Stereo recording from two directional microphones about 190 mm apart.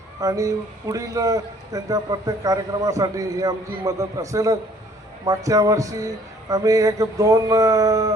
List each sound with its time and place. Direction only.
0.2 s speech: 15° right (ahead or behind)